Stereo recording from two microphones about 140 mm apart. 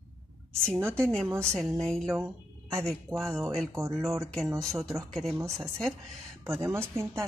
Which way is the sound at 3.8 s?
20° right (ahead or behind).